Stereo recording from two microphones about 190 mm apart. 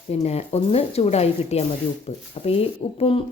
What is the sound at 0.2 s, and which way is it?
Speech, 35° left (ahead or behind).